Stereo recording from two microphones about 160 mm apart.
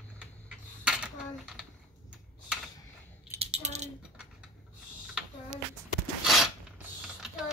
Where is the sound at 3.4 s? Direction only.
40° right (ahead or behind).